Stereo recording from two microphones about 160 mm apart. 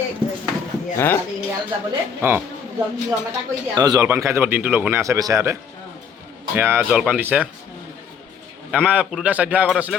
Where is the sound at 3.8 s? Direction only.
25° right (ahead or behind).